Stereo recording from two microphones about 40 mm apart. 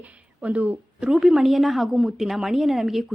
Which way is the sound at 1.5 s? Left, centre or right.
Centre.